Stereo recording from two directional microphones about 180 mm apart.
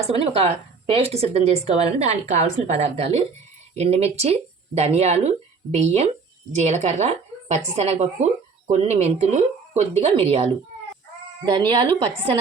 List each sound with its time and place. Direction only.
0.1 s speech: 35° right (ahead or behind)
11.4 s speech: 25° right (ahead or behind)